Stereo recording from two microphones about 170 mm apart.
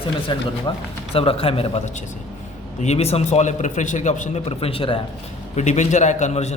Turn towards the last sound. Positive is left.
turn(degrees=40)  # may be behind; listen again after turning